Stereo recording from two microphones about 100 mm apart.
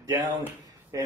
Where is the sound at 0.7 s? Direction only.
35° right (ahead or behind).